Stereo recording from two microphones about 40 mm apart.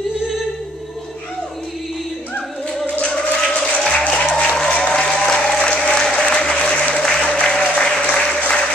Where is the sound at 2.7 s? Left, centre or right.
Centre.